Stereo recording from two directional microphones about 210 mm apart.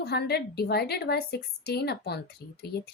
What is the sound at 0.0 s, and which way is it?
A woman's voice, 50° left (ahead or behind).